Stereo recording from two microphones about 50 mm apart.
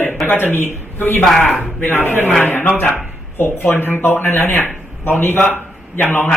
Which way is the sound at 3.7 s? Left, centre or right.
Left.